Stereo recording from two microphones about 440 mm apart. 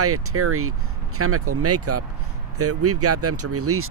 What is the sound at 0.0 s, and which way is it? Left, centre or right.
Speech, right.